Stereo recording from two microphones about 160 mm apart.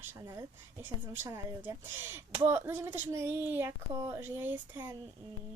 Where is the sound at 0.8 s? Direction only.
15° right (ahead or behind).